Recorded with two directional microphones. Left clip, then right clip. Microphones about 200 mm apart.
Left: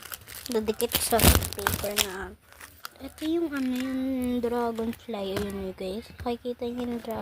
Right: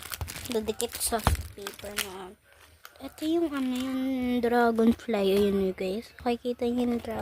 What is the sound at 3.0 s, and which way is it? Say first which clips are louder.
Speech: right 1 dB; 20° right (ahead or behind).